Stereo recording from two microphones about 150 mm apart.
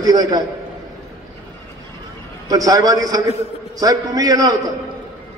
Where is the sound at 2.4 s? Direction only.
25° right (ahead or behind).